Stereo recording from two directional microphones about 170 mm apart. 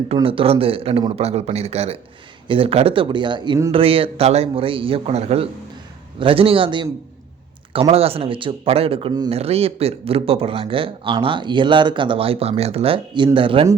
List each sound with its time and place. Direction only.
0.1 s speech: 35° right (ahead or behind)